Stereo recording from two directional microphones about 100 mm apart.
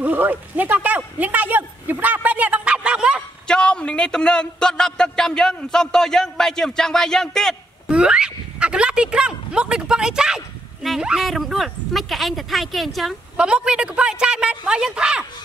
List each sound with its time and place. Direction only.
0.0 s speech: 20° right (ahead or behind)
3.4 s a man's voice: 10° left (ahead or behind)
7.9 s speech: 10° right (ahead or behind)